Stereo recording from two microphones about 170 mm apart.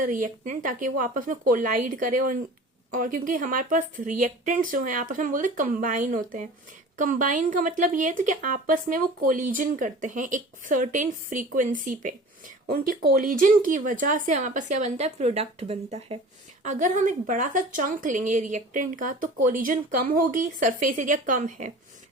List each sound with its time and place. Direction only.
0.0 s speech: 50° right (ahead or behind)
12.6 s speech: 60° right (ahead or behind); by 16.1 s 35° right (ahead or behind)
16.6 s speech: 45° right (ahead or behind)